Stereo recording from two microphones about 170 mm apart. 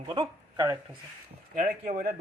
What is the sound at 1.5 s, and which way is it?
Speech, 40° right (ahead or behind).